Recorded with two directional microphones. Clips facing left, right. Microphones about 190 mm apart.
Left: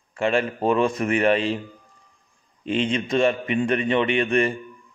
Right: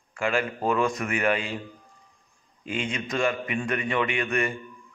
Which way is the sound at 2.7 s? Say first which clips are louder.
Left 7 dB; 25° left (ahead or behind).